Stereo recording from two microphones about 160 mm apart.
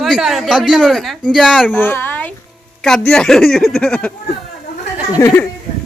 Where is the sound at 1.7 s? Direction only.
15° left (ahead or behind).